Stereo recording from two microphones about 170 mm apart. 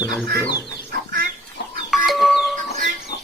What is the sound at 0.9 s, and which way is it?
Chicken, 60° right (ahead or behind).